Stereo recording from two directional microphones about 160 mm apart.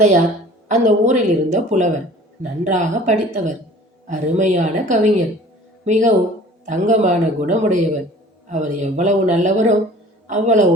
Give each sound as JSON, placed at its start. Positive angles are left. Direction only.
{"t": 0.7, "sound": "speech", "side_deg": -45}